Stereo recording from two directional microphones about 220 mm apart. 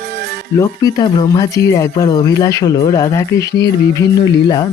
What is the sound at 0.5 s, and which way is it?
Speech, 15° left (ahead or behind).